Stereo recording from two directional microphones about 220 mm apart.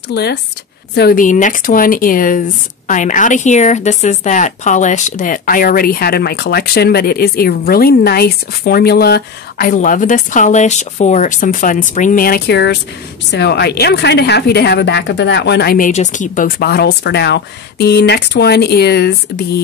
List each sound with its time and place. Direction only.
0.1 s a woman's voice: 50° left (ahead or behind)